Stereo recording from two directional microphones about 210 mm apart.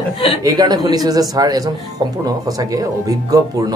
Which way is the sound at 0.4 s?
20° right (ahead or behind).